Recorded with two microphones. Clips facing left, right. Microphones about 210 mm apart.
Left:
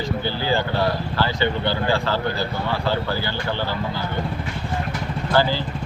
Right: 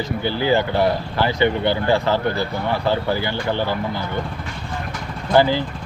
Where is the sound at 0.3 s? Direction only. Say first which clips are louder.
Right 6 dB; 20° right (ahead or behind).